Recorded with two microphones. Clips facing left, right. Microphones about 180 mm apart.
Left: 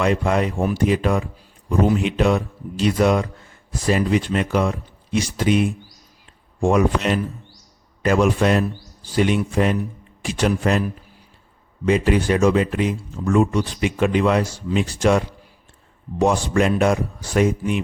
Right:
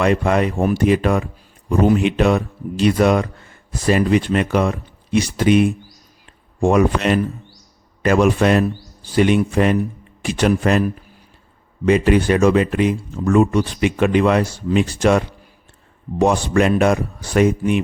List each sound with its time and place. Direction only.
0.0 s speech: 65° right (ahead or behind)
11.9 s speech: 65° right (ahead or behind)